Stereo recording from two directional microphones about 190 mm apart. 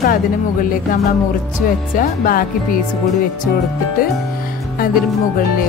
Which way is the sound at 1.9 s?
50° left (ahead or behind).